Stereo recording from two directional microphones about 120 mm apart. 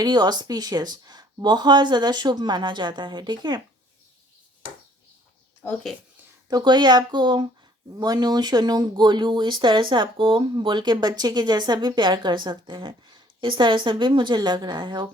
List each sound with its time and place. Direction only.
0.0 s speech: 35° right (ahead or behind)
6.5 s speech: 35° right (ahead or behind)